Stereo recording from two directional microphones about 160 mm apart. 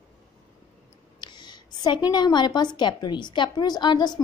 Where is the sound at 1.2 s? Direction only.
25° left (ahead or behind).